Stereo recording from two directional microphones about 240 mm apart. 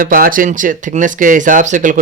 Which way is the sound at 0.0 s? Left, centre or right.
Right.